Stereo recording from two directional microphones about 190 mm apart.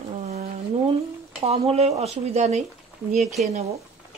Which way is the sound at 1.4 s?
30° right (ahead or behind).